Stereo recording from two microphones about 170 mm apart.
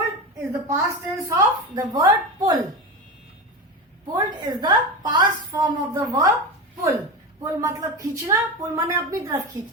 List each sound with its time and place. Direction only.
0.7 s a woman's voice: 15° right (ahead or behind)
4.1 s a woman's voice: 25° right (ahead or behind)
7.4 s a woman's voice: 20° right (ahead or behind)